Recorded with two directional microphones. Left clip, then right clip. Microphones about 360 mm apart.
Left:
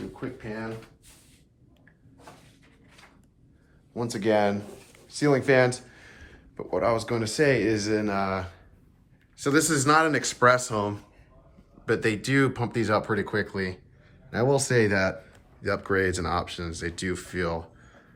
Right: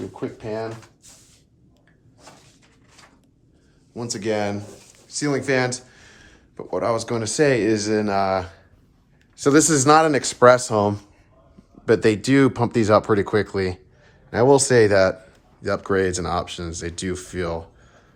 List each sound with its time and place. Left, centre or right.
0.2 s speech: centre
3.9 s speech: centre